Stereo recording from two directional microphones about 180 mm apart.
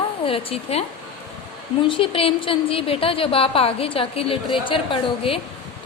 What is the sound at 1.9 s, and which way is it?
A woman's voice, 30° left (ahead or behind).